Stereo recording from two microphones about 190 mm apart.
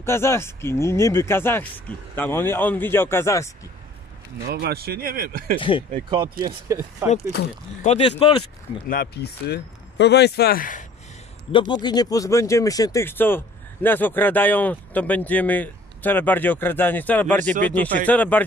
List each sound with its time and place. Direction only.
0.0 s speech: 15° left (ahead or behind)
4.4 s speech: 55° right (ahead or behind)
5.6 s speech: 25° left (ahead or behind)
6.0 s speech: 25° right (ahead or behind)
7.8 s speech: 35° left (ahead or behind)
8.8 s speech: 50° left (ahead or behind)
11.5 s speech: 25° left (ahead or behind)